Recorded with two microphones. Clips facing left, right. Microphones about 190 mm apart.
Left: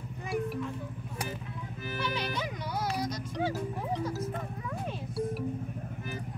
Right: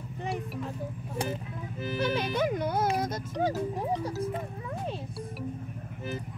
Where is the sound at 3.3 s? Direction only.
40° right (ahead or behind).